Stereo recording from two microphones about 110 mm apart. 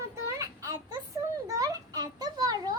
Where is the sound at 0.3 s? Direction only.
30° right (ahead or behind).